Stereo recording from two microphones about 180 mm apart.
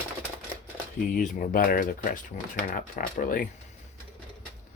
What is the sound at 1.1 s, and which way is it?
Speech, 50° left (ahead or behind).